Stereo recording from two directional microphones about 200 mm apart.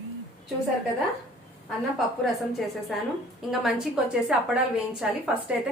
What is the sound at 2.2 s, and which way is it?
A woman's voice, centre (ahead or behind).